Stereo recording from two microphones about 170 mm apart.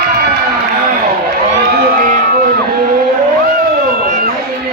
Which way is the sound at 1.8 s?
60° right (ahead or behind).